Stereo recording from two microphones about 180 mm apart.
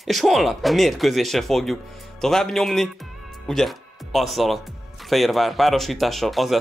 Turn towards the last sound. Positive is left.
turn(degrees=0)  # may be behind; listen again after turning